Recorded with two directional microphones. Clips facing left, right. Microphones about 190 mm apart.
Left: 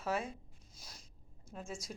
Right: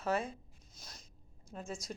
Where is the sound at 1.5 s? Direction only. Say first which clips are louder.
Right 1 dB; centre (ahead or behind).